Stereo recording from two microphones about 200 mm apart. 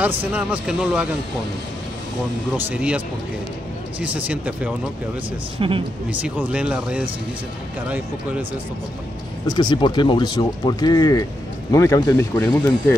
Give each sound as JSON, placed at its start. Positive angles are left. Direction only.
{"t": 0.2, "sound": "speech", "side_deg": -5}
{"t": 2.5, "sound": "speech", "side_deg": -5}
{"t": 4.0, "sound": "speech", "side_deg": -5}
{"t": 5.6, "sound": "speech", "side_deg": -25}
{"t": 6.2, "sound": "speech", "side_deg": -5}
{"t": 9.5, "sound": "speech", "side_deg": 20}